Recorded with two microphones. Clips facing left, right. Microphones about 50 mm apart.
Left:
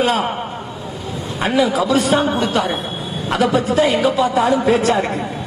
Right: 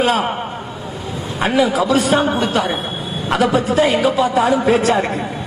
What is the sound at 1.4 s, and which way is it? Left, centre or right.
Speech, centre.